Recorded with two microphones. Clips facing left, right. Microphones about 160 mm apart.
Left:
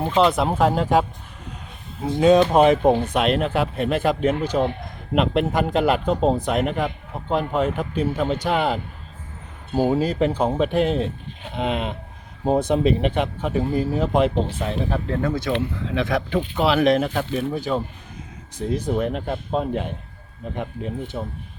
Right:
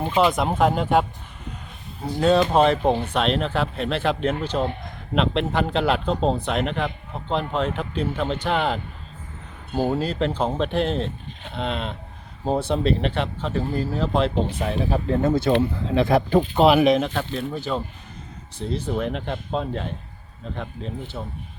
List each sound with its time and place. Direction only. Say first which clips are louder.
0.1 s speech: left 2 dB; centre (ahead or behind)
2.5 s speech: left 3 dB; 10° left (ahead or behind)
15.0 s speech: right 3 dB; 25° right (ahead or behind)
16.8 s speech: even; 5° left (ahead or behind)